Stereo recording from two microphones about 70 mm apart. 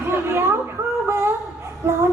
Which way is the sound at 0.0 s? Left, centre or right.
Right.